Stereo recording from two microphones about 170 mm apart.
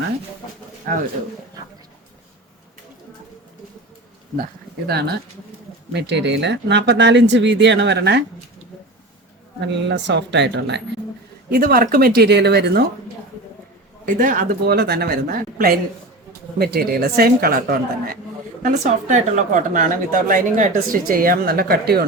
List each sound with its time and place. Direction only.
0.9 s speech: 50° right (ahead or behind)
4.9 s speech: 70° right (ahead or behind)
5.9 s speech: 85° right
9.6 s speech: 90° right
11.5 s speech: 60° right (ahead or behind); by 12.8 s 75° right (ahead or behind)
14.0 s speech: 50° right (ahead or behind)
18.7 s speech: 45° right (ahead or behind); by 22.0 s 65° right (ahead or behind)